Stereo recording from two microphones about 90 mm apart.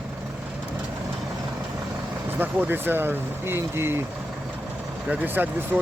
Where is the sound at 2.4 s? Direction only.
20° right (ahead or behind).